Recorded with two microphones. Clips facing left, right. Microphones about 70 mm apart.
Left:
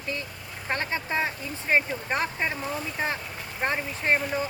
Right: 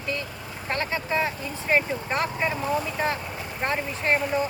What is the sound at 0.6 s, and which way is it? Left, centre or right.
Speech, left.